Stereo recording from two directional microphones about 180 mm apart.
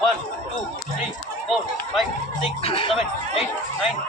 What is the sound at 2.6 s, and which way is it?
Speech, 30° left (ahead or behind).